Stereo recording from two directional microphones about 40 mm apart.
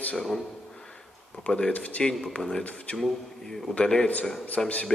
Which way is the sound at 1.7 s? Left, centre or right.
Left.